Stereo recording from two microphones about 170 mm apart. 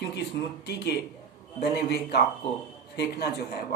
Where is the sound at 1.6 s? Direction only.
70° left (ahead or behind).